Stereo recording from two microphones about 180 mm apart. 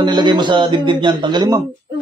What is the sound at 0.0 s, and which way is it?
Speech, 25° right (ahead or behind).